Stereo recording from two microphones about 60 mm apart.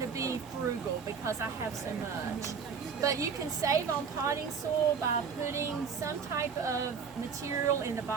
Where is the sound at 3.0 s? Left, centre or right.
Right.